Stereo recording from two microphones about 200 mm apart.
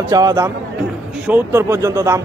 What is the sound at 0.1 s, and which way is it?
A man's voice, 15° right (ahead or behind).